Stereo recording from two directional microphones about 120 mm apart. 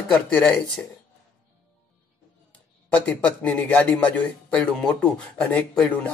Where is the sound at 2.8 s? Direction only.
10° left (ahead or behind).